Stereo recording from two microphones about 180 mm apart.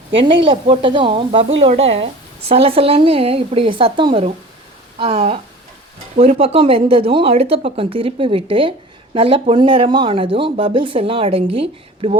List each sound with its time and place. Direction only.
0.1 s speech: 30° right (ahead or behind)